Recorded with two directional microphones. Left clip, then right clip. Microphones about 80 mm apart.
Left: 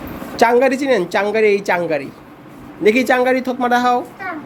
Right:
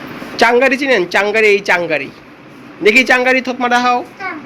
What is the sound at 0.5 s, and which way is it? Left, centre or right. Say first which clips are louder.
A man's voice: right 3 dB; left.